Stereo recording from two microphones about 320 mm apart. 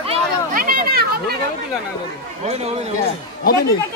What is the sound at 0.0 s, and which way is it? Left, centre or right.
Chatter, right.